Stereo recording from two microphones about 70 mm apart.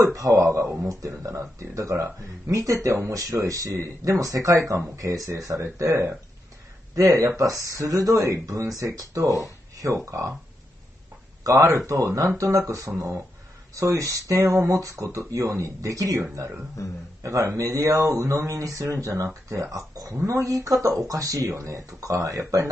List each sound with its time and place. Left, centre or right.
0.0 s speech: right
11.4 s speech: right
16.8 s a man's voice: left
17.2 s speech: right